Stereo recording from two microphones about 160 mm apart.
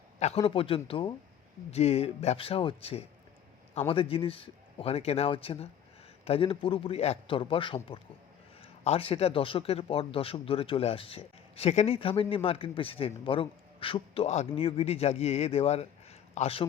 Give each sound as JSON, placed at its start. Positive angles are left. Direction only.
{"t": 0.2, "sound": "speech", "side_deg": 40}